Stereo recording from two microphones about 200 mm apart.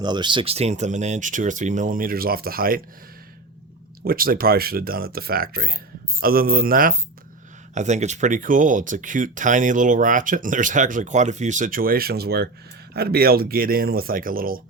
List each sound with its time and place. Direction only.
0.0 s speech: 20° right (ahead or behind); by 2.8 s 45° right (ahead or behind)
4.0 s speech: 45° right (ahead or behind)
7.8 s speech: 35° right (ahead or behind)